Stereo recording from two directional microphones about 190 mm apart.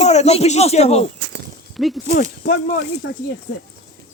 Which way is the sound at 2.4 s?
60° left (ahead or behind).